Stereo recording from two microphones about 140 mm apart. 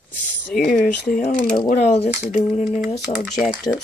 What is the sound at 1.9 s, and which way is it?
Speech, 50° left (ahead or behind).